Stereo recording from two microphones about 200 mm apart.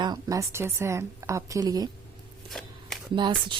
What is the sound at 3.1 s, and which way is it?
Speech, 25° right (ahead or behind).